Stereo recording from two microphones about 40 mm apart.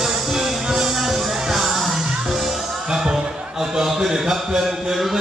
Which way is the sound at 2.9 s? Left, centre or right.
Centre.